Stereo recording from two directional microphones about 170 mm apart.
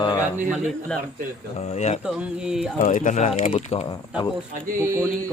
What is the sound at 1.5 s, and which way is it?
Speech, 40° left (ahead or behind).